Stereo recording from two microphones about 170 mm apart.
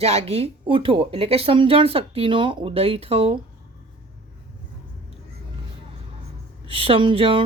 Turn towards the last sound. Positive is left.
turn(degrees=-30)  # may be behind; listen again after turning